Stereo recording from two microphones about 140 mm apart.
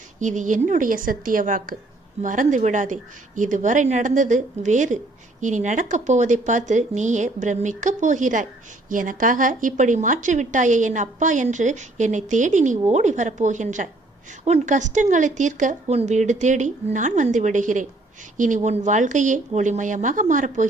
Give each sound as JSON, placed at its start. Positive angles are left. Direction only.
{"t": 0.2, "sound": "a woman's voice", "side_deg": -60}